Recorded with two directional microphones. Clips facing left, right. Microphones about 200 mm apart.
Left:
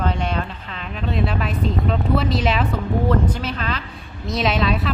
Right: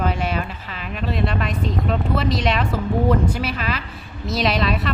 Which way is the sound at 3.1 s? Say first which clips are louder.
Right 1 dB; 10° right (ahead or behind).